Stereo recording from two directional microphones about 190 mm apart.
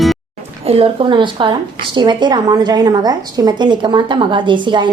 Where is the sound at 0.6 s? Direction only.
30° right (ahead or behind).